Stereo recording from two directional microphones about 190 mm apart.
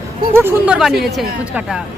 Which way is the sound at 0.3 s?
10° right (ahead or behind).